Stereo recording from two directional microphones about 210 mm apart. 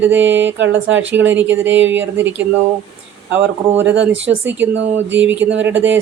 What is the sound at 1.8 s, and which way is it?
Speech, 60° right (ahead or behind).